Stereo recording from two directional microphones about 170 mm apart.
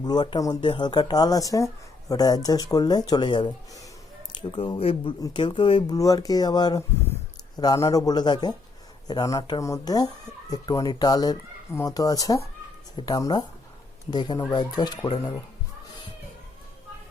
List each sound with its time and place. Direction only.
0.0 s speech: 25° left (ahead or behind)